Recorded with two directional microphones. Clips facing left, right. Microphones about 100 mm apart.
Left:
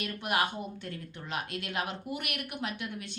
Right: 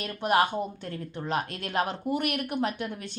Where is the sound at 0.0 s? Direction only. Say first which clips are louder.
Right 6 dB; 35° right (ahead or behind).